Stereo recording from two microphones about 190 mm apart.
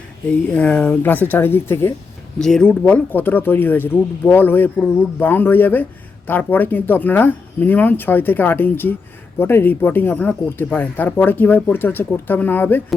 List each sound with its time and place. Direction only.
0.4 s speech: 5° left (ahead or behind)